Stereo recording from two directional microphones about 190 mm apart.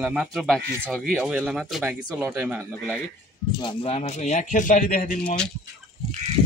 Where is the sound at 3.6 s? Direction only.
30° left (ahead or behind); by 5.2 s 45° left (ahead or behind).